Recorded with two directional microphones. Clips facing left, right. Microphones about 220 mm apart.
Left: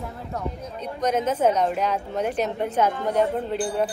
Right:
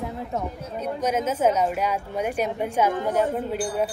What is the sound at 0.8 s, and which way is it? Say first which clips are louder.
A woman's voice: left 1 dB; 10° right (ahead or behind).